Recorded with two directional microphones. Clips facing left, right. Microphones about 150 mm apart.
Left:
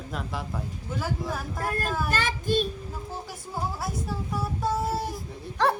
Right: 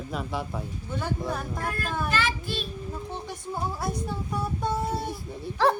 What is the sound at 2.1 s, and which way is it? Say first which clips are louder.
Child singing: left 2 dB; 45° left (ahead or behind).